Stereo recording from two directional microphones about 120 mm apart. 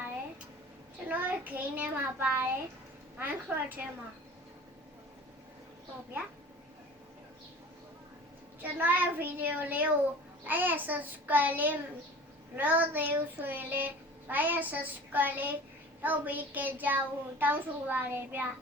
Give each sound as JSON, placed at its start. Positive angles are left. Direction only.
{"t": 1.0, "sound": "a child's voice", "side_deg": -15}
{"t": 8.6, "sound": "a child's voice", "side_deg": -15}